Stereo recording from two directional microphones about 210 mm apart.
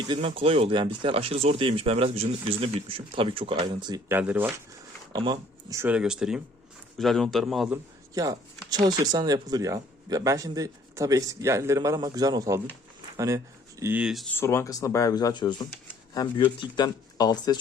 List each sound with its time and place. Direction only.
0.1 s speech: 25° right (ahead or behind)
4.2 s speech: 10° right (ahead or behind)
5.1 s a man's voice: 20° right (ahead or behind); by 7.8 s centre (ahead or behind)
8.1 s speech: 15° right (ahead or behind)
14.3 s speech: 15° left (ahead or behind)